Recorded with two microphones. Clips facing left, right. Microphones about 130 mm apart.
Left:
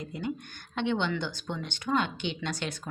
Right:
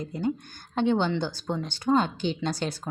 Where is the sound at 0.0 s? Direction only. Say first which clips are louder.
Right 5 dB; 35° right (ahead or behind).